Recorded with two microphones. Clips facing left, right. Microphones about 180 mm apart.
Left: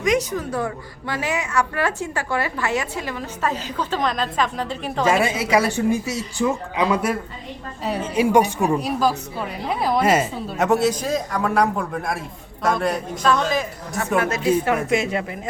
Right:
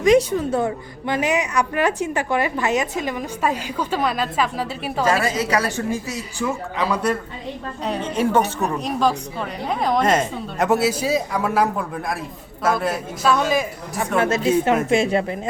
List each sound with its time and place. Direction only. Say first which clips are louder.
0.0 s a woman's voice: right 6 dB; 30° right (ahead or behind); by 5.0 s 5° right (ahead or behind)
5.1 s speech: left 2 dB; 15° left (ahead or behind)
6.9 s a woman's voice: even; 10° left (ahead or behind); by 14.1 s 10° right (ahead or behind)
14.2 s a woman's voice: right 2 dB; 25° right (ahead or behind)